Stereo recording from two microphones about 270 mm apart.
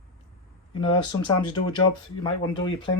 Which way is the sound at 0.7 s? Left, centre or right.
Centre.